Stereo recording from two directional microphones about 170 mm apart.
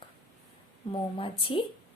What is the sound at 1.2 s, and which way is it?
Speech, 30° left (ahead or behind).